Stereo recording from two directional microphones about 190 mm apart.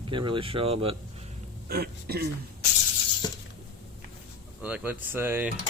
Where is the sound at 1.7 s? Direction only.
55° right (ahead or behind).